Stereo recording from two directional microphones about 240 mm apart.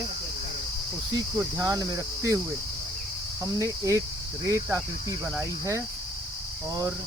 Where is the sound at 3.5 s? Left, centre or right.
Centre.